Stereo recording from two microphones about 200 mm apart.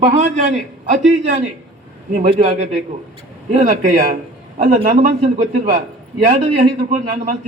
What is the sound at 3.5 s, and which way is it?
A man's voice, 35° right (ahead or behind).